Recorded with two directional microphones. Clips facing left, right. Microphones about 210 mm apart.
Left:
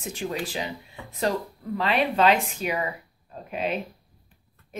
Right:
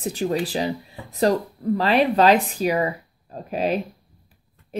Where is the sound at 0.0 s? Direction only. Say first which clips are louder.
Right 7 dB; 35° right (ahead or behind).